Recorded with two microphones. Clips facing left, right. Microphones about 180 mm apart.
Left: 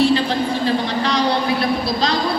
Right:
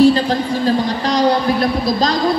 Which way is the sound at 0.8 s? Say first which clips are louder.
Right 2 dB; 45° right (ahead or behind).